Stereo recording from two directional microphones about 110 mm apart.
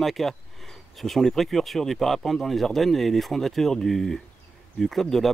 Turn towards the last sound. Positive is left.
turn(degrees=0)  # may be behind; listen again after turning